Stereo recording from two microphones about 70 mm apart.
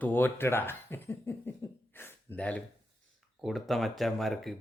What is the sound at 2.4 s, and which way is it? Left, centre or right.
Speech, centre.